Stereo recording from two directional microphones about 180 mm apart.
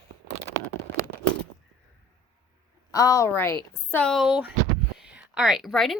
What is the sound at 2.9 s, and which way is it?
A woman's voice, 20° left (ahead or behind).